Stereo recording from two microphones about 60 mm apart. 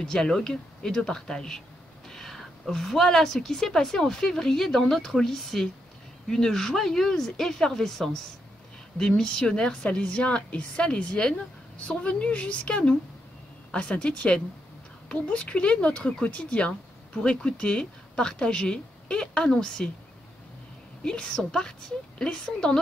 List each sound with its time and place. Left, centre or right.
0.0 s a woman's voice: centre
21.0 s speech: centre